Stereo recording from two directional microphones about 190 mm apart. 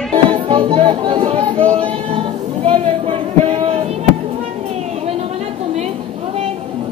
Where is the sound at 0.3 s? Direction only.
30° right (ahead or behind).